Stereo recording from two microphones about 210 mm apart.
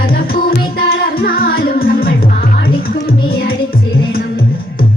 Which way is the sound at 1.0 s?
45° left (ahead or behind).